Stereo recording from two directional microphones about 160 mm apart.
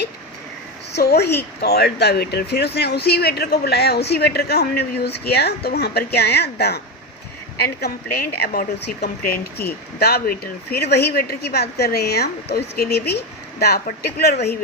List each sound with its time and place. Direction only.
0.9 s speech: 90° left
7.6 s a woman's voice: 75° left (ahead or behind)